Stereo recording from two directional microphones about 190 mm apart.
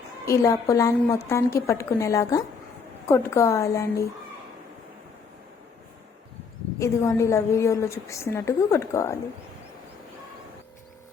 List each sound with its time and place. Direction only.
0.3 s a woman's voice: 15° left (ahead or behind)
6.7 s a woman's voice: 15° left (ahead or behind)